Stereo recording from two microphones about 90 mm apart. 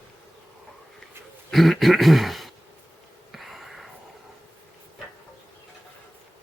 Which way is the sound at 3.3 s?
Centre (ahead or behind).